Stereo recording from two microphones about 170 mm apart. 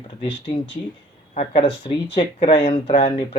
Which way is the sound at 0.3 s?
90° left.